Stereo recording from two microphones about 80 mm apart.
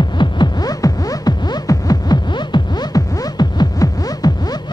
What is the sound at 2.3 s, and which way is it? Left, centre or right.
Music, left.